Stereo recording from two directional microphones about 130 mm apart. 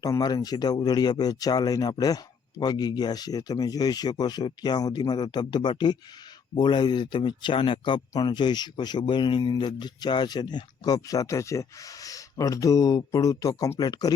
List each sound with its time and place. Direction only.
0.0 s speech: 30° left (ahead or behind)